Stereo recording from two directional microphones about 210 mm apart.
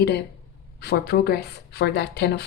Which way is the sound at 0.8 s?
50° left (ahead or behind).